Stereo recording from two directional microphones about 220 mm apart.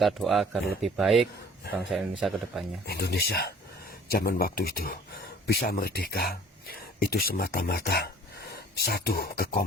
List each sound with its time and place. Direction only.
0.0 s speech: centre (ahead or behind)
2.8 s speech: 45° left (ahead or behind)